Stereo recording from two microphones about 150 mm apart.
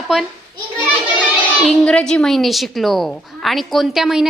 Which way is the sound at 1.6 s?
Centre (ahead or behind).